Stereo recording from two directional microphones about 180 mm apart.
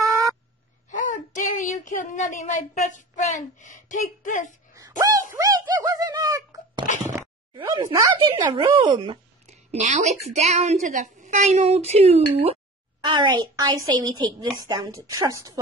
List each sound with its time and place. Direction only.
0.8 s child singing: 45° left (ahead or behind)
4.7 s dog: 20° right (ahead or behind)
5.3 s sneeze: 20° right (ahead or behind)
7.5 s a woman's voice: 25° right (ahead or behind)
9.5 s a woman's voice: 40° right (ahead or behind); by 15.6 s 20° right (ahead or behind)